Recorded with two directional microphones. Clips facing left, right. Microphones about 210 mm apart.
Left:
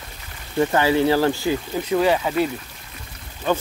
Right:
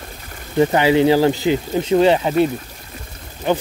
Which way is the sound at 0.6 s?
15° right (ahead or behind).